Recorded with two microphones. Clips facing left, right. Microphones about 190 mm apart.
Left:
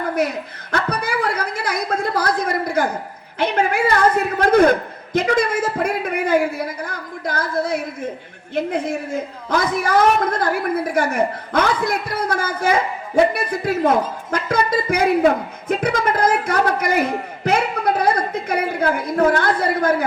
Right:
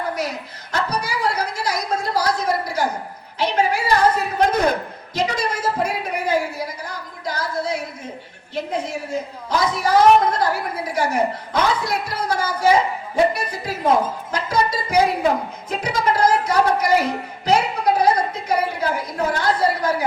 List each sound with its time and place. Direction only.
0.2 s a man's voice: 55° left (ahead or behind)